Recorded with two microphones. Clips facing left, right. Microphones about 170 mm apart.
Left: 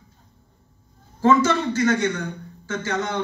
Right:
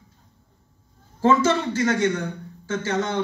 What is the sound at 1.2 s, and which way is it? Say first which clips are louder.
Speech: left 1 dB; 30° right (ahead or behind).